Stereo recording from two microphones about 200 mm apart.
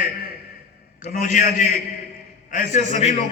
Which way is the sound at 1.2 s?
40° left (ahead or behind).